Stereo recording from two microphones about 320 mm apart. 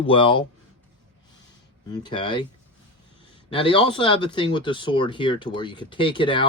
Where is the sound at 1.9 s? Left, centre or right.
Centre.